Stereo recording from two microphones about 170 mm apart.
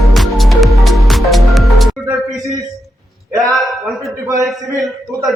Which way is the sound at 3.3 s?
20° right (ahead or behind).